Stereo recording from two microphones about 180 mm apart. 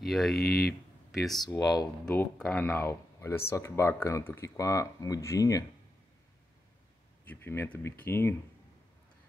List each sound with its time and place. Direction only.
0.0 s speech: centre (ahead or behind)
0.4 s speech: 60° left (ahead or behind)
1.4 s speech: 20° left (ahead or behind)
2.0 s speech: 5° left (ahead or behind)
7.2 s speech: 10° left (ahead or behind)